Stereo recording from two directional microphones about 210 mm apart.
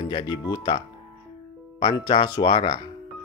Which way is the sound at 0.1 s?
20° left (ahead or behind).